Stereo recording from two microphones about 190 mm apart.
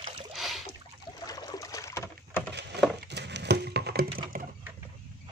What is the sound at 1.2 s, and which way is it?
Rowboat, 20° left (ahead or behind).